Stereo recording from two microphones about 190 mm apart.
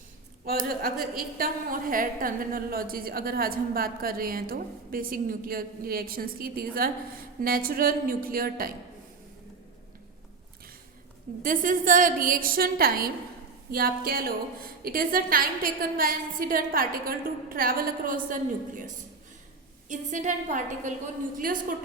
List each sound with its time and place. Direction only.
0.4 s a woman's voice: 50° right (ahead or behind)
11.4 s a woman's voice: 45° right (ahead or behind)
19.9 s a woman's voice: 40° right (ahead or behind)